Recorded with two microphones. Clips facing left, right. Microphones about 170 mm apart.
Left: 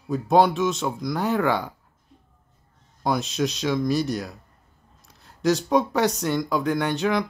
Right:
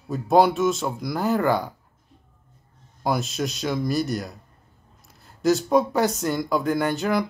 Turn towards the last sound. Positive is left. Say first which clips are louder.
# even
turn(degrees=0)  # may be behind; listen again after turning